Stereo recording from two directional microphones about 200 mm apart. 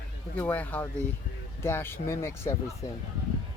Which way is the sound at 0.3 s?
10° left (ahead or behind).